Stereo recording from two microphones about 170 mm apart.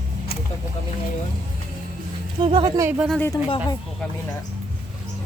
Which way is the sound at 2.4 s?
25° right (ahead or behind).